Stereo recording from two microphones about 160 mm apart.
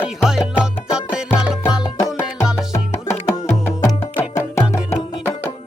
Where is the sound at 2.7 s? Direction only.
15° left (ahead or behind).